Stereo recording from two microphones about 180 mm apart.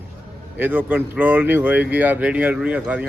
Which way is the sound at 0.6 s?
10° right (ahead or behind).